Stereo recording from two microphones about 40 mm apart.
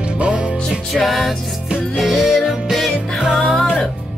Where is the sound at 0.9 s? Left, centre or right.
Centre.